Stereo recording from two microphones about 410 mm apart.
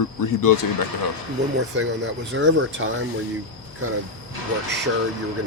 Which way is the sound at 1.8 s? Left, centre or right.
Right.